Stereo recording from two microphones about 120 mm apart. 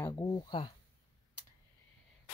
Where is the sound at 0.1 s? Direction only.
35° left (ahead or behind).